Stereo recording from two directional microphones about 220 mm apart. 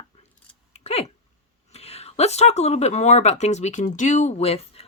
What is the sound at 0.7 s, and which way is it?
Hiccup, 30° left (ahead or behind).